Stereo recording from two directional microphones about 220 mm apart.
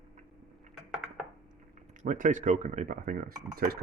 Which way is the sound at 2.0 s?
35° right (ahead or behind).